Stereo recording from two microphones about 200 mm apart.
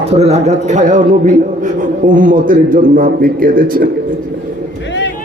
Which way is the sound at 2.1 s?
40° right (ahead or behind).